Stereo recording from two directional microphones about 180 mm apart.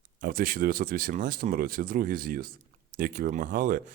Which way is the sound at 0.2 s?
55° right (ahead or behind).